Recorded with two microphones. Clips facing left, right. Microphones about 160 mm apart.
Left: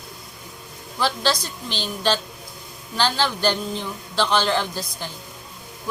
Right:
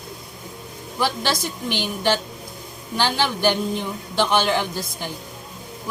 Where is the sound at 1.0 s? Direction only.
15° right (ahead or behind).